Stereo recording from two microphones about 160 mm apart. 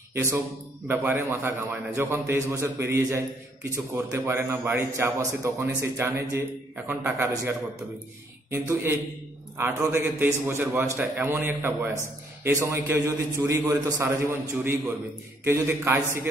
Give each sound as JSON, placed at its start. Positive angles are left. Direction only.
{"t": 0.1, "sound": "a man's voice", "side_deg": -15}